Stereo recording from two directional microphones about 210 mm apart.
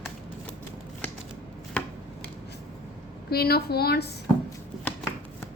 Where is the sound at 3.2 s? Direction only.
50° left (ahead or behind).